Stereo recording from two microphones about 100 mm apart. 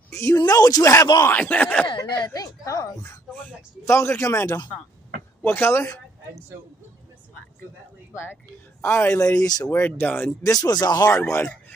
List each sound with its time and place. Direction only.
0.1 s speech: 30° left (ahead or behind)
0.4 s speech: 40° left (ahead or behind)
1.2 s speech: 15° left (ahead or behind)
1.9 s speech: 45° left (ahead or behind); by 5.9 s 25° left (ahead or behind)
8.8 s speech: 25° left (ahead or behind)
10.4 s speech: 40° left (ahead or behind)
11.1 s speech: 25° left (ahead or behind)